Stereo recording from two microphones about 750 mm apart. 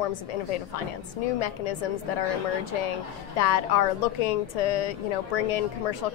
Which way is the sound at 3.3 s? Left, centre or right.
Left.